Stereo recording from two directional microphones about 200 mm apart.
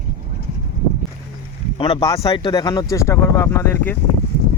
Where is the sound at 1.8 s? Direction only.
20° left (ahead or behind).